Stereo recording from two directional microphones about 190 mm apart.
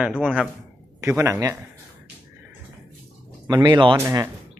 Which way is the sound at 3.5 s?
15° right (ahead or behind).